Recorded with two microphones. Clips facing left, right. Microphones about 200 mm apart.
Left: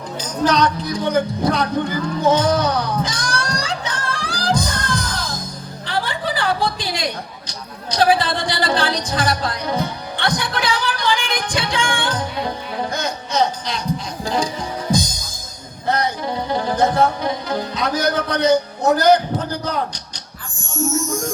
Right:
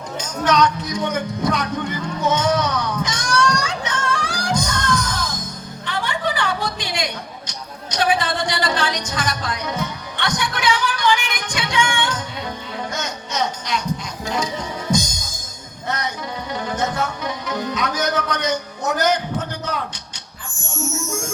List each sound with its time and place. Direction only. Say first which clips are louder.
0.2 s a sound: left 1 dB; 35° left (ahead or behind)
14.3 s music: left 2 dB; 30° left (ahead or behind)
20.9 s music: left 5 dB; 35° left (ahead or behind)